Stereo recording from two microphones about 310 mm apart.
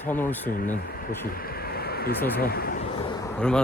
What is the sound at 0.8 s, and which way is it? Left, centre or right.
Speech, left.